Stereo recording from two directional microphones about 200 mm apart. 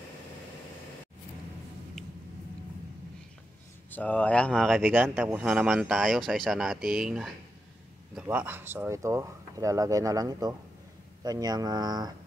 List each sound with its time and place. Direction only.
3.9 s speech: 5° left (ahead or behind)
4.8 s speech: 10° right (ahead or behind)